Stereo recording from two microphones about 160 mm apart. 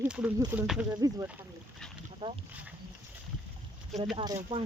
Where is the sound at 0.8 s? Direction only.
20° right (ahead or behind).